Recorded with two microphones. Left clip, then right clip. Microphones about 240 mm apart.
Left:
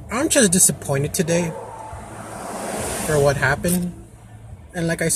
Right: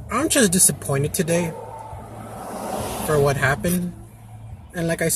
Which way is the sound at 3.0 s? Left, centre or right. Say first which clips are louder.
Left 1 dB; centre.